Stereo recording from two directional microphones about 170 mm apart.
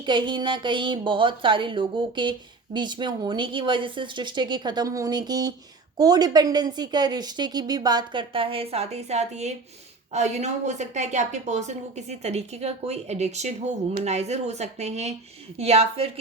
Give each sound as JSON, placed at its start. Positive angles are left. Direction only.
{"t": 0.0, "sound": "a woman's voice", "side_deg": -30}